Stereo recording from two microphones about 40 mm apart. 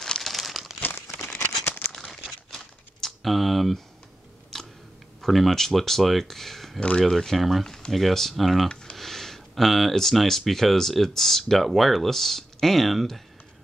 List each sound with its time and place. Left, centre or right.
0.0 s crumpling: centre
0.3 s crumpling: centre
1.4 s crumpling: left
2.5 s a sound: centre
4.5 s chewing: centre
5.2 s speech: centre
7.6 s a sound: centre
7.9 s speech: centre